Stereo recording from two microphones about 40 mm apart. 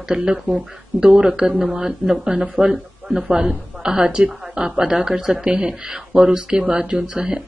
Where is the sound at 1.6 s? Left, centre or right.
Centre.